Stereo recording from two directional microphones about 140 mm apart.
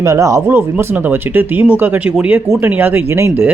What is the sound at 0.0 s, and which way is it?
Speech, 20° right (ahead or behind).